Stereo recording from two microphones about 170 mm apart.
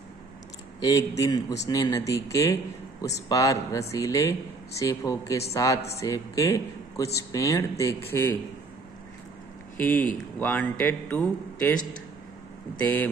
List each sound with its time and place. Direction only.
0.7 s a man's voice: 20° left (ahead or behind)
9.8 s a man's voice: 10° left (ahead or behind)